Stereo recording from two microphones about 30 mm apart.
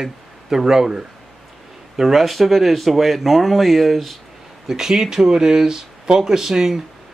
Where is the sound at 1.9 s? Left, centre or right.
Centre.